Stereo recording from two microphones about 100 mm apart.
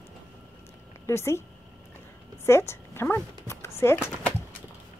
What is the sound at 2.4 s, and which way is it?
Speech, 25° left (ahead or behind).